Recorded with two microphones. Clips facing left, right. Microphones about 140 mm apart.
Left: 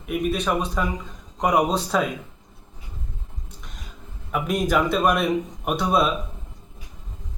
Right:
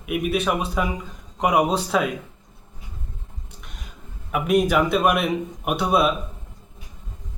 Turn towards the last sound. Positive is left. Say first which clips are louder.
# right 1 dB
turn(degrees=-5)  # may be behind; listen again after turning